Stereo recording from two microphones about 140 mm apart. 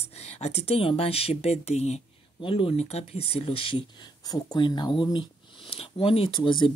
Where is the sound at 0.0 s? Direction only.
50° left (ahead or behind).